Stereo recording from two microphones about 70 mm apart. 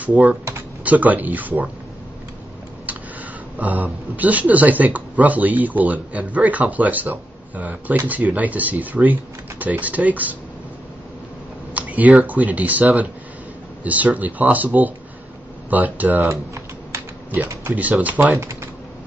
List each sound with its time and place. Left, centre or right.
0.0 s speech: right
3.5 s speech: right
11.7 s speech: right
13.8 s speech: right
16.3 s typing: right
17.4 s speech: right
18.0 s speech: right
18.3 s speech: right